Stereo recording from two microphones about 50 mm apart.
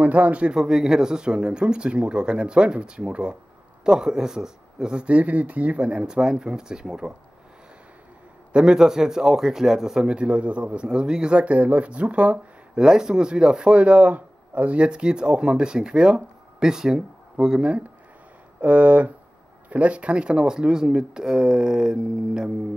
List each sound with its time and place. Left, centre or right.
0.0 s speech: right
0.6 s speech: centre
8.5 s speech: centre
10.0 s speech: right